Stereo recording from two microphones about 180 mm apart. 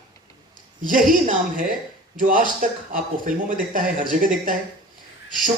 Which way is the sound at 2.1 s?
50° right (ahead or behind).